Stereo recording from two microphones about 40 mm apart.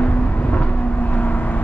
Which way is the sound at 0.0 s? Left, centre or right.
Left.